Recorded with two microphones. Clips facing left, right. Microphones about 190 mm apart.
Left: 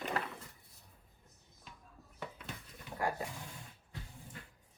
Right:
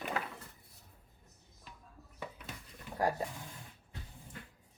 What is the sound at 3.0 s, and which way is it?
Speech, 35° right (ahead or behind).